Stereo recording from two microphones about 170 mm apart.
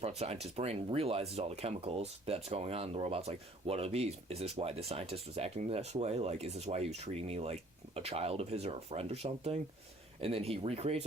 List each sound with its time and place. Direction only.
0.0 s speech: 40° right (ahead or behind)